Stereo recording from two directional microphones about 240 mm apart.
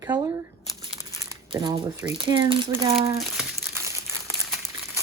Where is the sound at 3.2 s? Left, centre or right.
Centre.